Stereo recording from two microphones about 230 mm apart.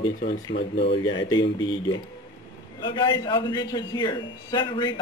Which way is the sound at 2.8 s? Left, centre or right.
Centre.